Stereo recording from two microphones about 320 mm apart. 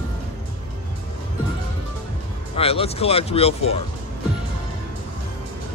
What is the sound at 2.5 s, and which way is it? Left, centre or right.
Speech, centre.